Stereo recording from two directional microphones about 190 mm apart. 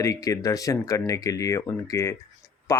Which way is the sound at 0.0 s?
15° left (ahead or behind).